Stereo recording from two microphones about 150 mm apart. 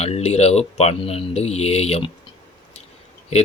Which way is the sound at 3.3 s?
45° left (ahead or behind).